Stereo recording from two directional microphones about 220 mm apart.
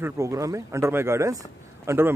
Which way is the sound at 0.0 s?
15° right (ahead or behind).